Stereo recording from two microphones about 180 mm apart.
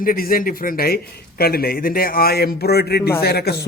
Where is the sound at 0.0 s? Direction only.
50° left (ahead or behind).